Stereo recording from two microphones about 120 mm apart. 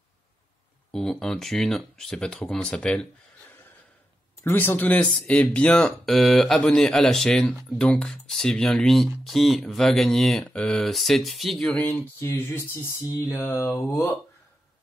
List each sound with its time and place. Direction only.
0.9 s speech: 5° left (ahead or behind)
4.5 s speech: 15° left (ahead or behind)
13.1 s mantra: 20° left (ahead or behind)